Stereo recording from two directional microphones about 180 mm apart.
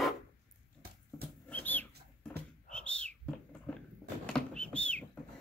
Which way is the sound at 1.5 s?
10° left (ahead or behind).